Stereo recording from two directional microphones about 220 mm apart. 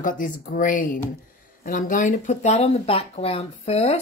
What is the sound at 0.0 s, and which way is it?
A woman's voice, 40° left (ahead or behind).